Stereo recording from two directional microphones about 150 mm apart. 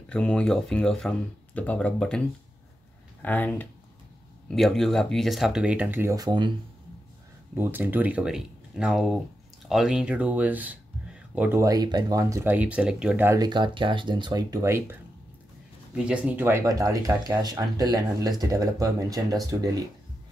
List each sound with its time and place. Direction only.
0.1 s speech: 5° left (ahead or behind); by 6.5 s 30° right (ahead or behind)
7.5 s speech: 15° right (ahead or behind)
13.4 s speech: 30° right (ahead or behind)
15.9 s speech: 5° right (ahead or behind); by 19.8 s 25° right (ahead or behind)